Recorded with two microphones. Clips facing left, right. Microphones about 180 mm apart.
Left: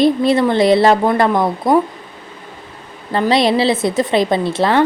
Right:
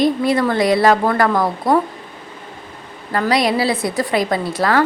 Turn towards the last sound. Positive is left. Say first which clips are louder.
# left 3 dB
turn(degrees=25)  # may be behind; listen again after turning